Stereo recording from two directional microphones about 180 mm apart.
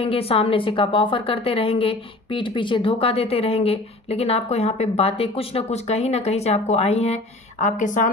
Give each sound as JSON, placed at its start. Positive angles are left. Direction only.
{"t": 0.0, "sound": "a woman's voice", "side_deg": 30}